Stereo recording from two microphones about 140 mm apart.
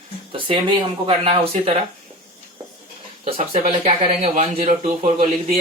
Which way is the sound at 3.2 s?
45° right (ahead or behind).